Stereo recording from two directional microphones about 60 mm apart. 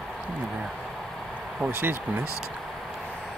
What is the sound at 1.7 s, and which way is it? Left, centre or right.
Speech, right.